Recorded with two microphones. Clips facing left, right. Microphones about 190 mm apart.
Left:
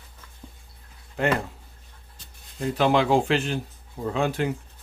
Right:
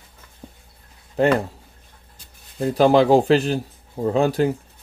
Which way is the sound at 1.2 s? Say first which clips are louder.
Right 6 dB; 35° right (ahead or behind).